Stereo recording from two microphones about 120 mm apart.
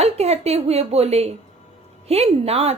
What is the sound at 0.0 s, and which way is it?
A woman's voice, 60° right (ahead or behind).